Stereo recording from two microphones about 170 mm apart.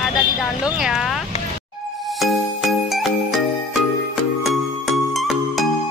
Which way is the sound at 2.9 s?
Centre (ahead or behind).